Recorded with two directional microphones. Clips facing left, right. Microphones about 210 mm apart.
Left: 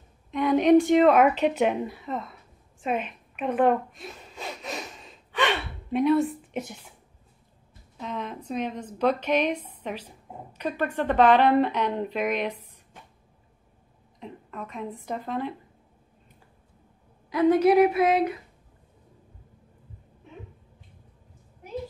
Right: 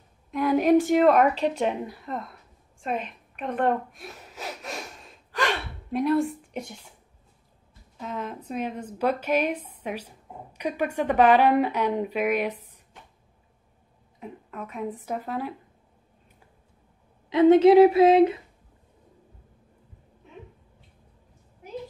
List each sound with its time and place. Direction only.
0.3 s a woman's voice: centre (ahead or behind)
2.8 s a sound: 5° left (ahead or behind)
8.0 s a woman's voice: 5° right (ahead or behind)
14.2 s a woman's voice: 5° right (ahead or behind)
17.3 s a woman's voice: 25° right (ahead or behind)